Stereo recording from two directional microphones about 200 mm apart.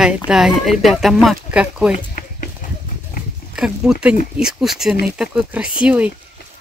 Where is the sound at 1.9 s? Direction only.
40° left (ahead or behind).